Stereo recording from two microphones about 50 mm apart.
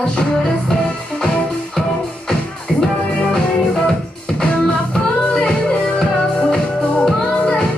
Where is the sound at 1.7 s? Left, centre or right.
Centre.